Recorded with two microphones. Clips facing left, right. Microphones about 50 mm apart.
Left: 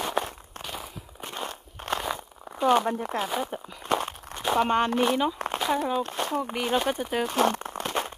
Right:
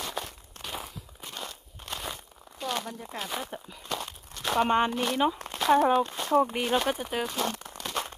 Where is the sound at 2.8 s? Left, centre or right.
Left.